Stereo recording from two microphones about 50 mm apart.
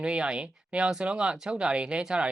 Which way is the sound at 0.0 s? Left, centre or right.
Right.